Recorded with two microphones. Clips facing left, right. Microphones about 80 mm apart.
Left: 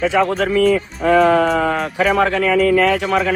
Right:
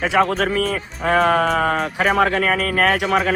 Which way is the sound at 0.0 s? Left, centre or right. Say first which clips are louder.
Left 1 dB; right.